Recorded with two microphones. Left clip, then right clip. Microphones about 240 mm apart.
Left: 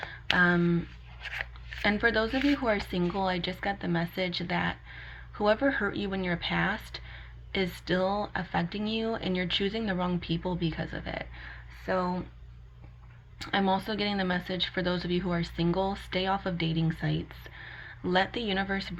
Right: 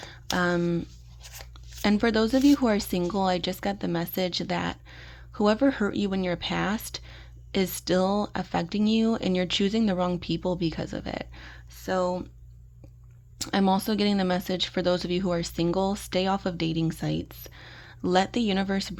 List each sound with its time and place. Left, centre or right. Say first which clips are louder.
0.3 s speech: even; right
1.2 s a sound: left 10 dB; right
1.8 s speech: right 2 dB; right
13.4 s speech: right 3 dB; right